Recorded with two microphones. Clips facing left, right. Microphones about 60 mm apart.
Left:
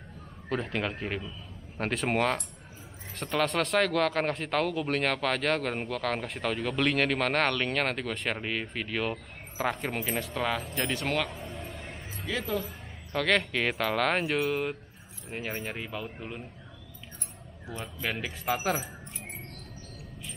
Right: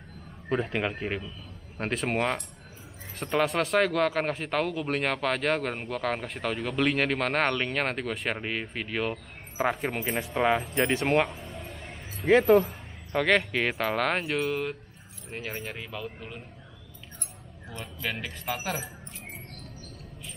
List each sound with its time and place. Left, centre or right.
0.5 s speech: centre; by 11.2 s right
11.2 s music: centre
12.3 s speech: right
13.1 s speech: centre
17.6 s speech: centre